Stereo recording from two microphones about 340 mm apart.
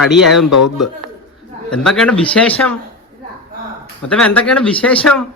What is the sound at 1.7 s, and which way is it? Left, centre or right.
Speech, centre.